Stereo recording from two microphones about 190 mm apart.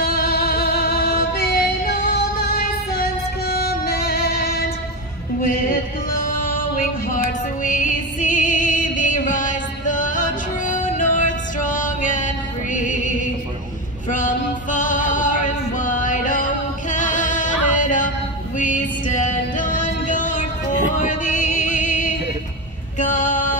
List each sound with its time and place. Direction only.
0.0 s music: 50° left (ahead or behind)
14.0 s male singing: 40° left (ahead or behind)
16.9 s music: 40° left (ahead or behind)
22.9 s female singing: 40° left (ahead or behind)